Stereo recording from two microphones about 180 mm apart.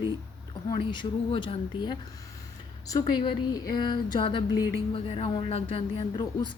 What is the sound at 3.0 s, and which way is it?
A woman's voice, 25° left (ahead or behind).